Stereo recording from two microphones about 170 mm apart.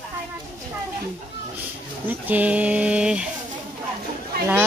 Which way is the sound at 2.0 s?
10° right (ahead or behind).